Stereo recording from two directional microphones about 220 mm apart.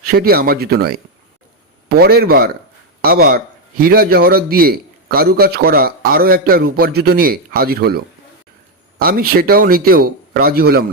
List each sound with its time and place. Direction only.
0.2 s a man's voice: 45° right (ahead or behind)
3.8 s a man's voice: 45° right (ahead or behind)